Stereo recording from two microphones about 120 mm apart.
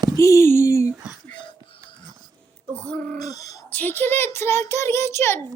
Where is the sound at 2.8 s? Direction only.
10° left (ahead or behind).